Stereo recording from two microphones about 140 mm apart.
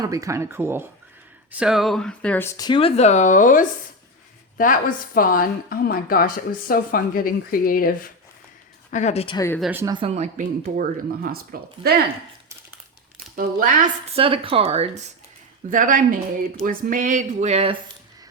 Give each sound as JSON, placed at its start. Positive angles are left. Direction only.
{"t": 0.0, "sound": "speech", "side_deg": -25}
{"t": 1.5, "sound": "speech", "side_deg": -5}
{"t": 2.6, "sound": "speech", "side_deg": 30}
{"t": 2.8, "sound": "a woman's voice", "side_deg": 50}
{"t": 8.9, "sound": "speech", "side_deg": 60}
{"t": 9.8, "sound": "speech", "side_deg": -35}
{"t": 10.2, "sound": "speech", "side_deg": -75}
{"t": 13.3, "sound": "speech", "side_deg": -80}
{"t": 14.2, "sound": "speech", "side_deg": -40}
{"t": 15.7, "sound": "a woman's voice", "side_deg": -70}